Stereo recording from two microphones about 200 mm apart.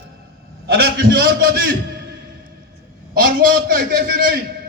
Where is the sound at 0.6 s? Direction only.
50° right (ahead or behind).